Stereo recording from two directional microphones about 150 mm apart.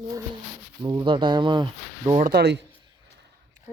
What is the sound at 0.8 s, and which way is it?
Speech, 25° right (ahead or behind).